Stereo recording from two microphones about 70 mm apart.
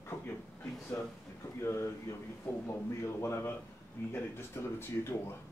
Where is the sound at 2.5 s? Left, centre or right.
Centre.